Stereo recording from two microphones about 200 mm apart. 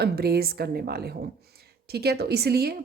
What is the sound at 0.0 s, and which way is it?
Speech, 50° right (ahead or behind).